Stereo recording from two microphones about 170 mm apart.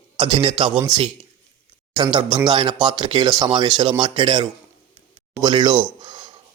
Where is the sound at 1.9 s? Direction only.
25° right (ahead or behind).